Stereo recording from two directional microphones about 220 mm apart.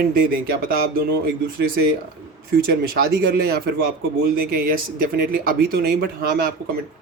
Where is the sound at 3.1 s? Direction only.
45° right (ahead or behind).